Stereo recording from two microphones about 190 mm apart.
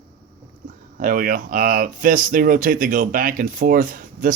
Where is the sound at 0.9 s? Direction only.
45° right (ahead or behind).